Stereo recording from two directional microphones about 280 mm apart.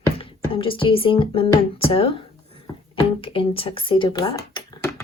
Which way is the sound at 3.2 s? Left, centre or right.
Centre.